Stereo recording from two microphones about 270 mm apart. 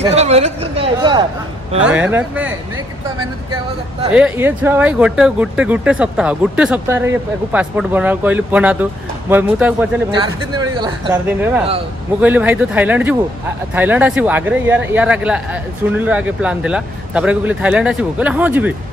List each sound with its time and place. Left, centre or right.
0.1 s speech: right
1.8 s speech: centre
4.1 s speech: centre
10.1 s speech: centre